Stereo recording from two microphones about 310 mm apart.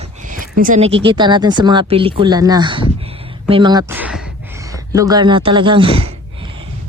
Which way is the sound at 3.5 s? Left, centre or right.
Centre.